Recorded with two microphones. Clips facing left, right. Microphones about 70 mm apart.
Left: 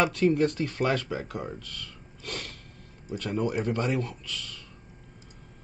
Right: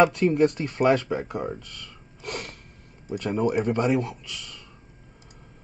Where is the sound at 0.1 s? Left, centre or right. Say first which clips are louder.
Right 3 dB; centre.